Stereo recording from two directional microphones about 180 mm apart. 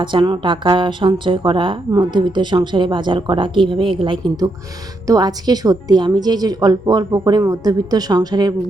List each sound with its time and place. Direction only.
0.0 s a woman's voice: 25° right (ahead or behind)